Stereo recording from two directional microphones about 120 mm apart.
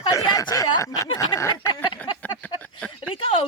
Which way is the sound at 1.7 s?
35° left (ahead or behind).